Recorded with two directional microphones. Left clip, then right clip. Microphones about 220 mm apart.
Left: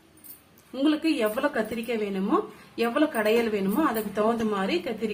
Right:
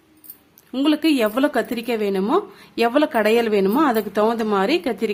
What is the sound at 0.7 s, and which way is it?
A woman's voice, 45° right (ahead or behind).